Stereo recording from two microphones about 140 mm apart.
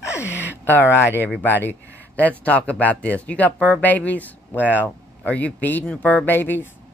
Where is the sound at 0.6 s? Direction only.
15° left (ahead or behind).